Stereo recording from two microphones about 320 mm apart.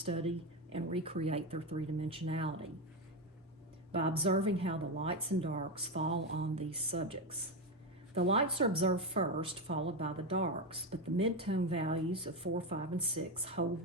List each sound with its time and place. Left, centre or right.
0.0 s speech: centre
3.9 s speech: centre